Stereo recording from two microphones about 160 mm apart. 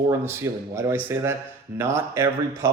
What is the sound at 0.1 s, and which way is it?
Speech, 15° right (ahead or behind).